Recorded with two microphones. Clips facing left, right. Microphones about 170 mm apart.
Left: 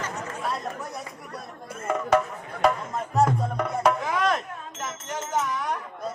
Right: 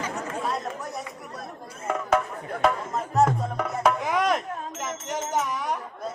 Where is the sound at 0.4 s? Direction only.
Centre (ahead or behind).